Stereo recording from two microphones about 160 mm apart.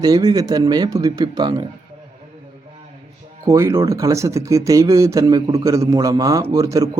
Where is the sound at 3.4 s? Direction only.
20° right (ahead or behind).